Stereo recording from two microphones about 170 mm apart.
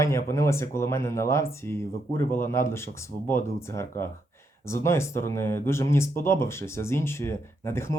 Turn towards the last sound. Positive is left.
turn(degrees=15)  # may be behind; listen again after turning